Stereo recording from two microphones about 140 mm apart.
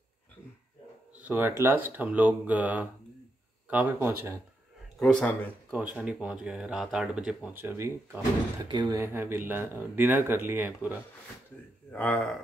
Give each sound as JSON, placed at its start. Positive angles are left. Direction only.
{"t": 1.2, "sound": "speech", "side_deg": -15}
{"t": 4.9, "sound": "speech", "side_deg": 5}
{"t": 5.9, "sound": "speech", "side_deg": -5}
{"t": 8.6, "sound": "speech", "side_deg": -30}
{"t": 8.9, "sound": "speech", "side_deg": -15}
{"t": 11.9, "sound": "speech", "side_deg": 10}